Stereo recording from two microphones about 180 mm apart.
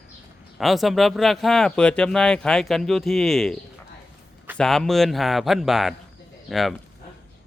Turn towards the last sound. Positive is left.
turn(degrees=0)  # may be behind; listen again after turning